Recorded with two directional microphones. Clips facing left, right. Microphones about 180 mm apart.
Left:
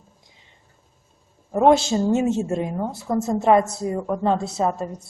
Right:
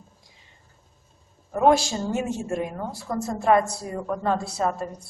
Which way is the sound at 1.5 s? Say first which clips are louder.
Left 3 dB; 25° left (ahead or behind).